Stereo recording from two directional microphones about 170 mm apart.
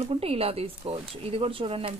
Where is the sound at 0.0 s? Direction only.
35° right (ahead or behind).